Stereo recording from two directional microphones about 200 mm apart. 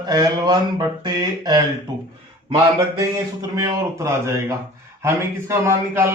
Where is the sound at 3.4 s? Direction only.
15° right (ahead or behind).